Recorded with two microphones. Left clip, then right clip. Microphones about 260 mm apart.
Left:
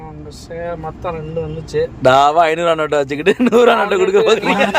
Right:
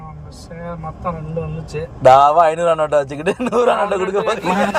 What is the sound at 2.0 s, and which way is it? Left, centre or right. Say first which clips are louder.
A man's voice: right 2 dB; centre.